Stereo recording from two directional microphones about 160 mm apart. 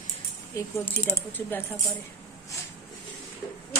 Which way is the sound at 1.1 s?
10° left (ahead or behind).